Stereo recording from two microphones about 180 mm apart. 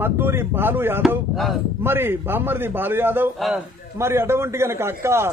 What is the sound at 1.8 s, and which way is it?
A man's voice, 10° right (ahead or behind).